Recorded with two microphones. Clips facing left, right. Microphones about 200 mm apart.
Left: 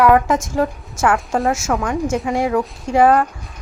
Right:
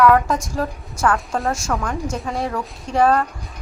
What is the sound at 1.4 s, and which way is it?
Speech, centre (ahead or behind).